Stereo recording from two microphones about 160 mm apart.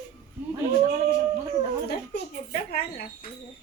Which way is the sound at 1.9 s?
85° left.